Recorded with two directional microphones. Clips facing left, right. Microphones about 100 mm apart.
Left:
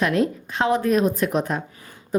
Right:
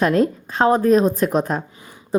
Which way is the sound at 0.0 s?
40° right (ahead or behind).